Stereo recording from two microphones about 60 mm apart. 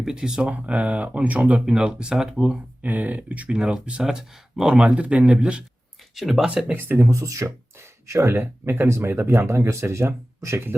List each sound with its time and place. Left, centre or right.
0.0 s speech: centre
0.5 s speech: right
1.6 s speech: centre
2.8 s speech: right
6.1 s speech: centre
6.4 s speech: centre
6.7 s speech: right
7.1 s speech: right
8.3 s speech: right